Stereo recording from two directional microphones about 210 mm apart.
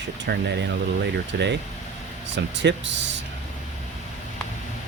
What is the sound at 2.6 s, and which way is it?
Speech, 60° right (ahead or behind).